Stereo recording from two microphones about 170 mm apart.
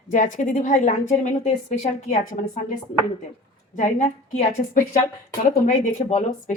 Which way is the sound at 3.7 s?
45° left (ahead or behind).